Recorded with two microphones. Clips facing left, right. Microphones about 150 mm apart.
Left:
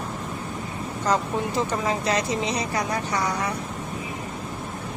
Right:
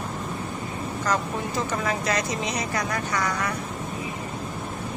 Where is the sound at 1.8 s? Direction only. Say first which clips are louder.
Left 2 dB; 25° left (ahead or behind).